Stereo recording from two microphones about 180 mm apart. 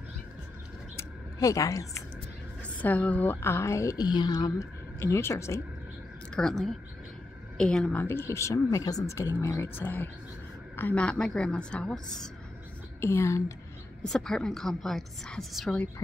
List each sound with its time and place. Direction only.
0.9 s a sound: 20° left (ahead or behind)
2.8 s a woman's voice: 10° left (ahead or behind)
6.3 s a woman's voice: 5° left (ahead or behind)
13.0 s a woman's voice: 15° left (ahead or behind)
14.0 s a woman's voice: 5° left (ahead or behind)